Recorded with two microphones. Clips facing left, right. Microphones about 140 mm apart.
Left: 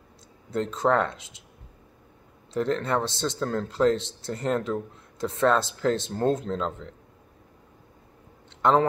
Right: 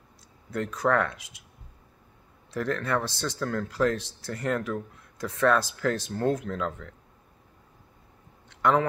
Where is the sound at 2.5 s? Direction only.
25° left (ahead or behind).